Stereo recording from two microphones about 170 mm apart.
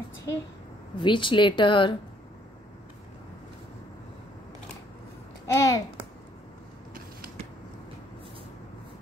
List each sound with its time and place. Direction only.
0.9 s a woman's voice: 30° left (ahead or behind)
5.5 s a child's voice: 20° left (ahead or behind)